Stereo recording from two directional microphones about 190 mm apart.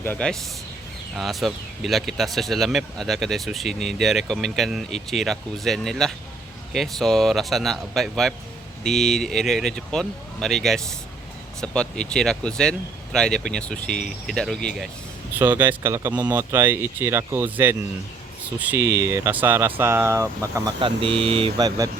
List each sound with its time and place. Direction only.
0.0 s speech: 10° left (ahead or behind)
15.4 s speech: 10° right (ahead or behind)
20.8 s speech: 30° right (ahead or behind)